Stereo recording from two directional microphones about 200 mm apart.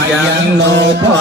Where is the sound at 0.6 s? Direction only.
60° right (ahead or behind).